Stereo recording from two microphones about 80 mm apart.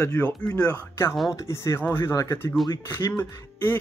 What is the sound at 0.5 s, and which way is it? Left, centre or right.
Speech, centre.